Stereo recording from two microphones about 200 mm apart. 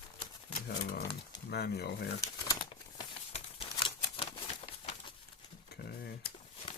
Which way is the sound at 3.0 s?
25° left (ahead or behind).